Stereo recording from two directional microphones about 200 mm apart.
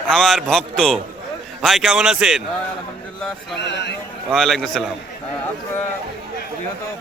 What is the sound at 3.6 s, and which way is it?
Speech, 60° left (ahead or behind).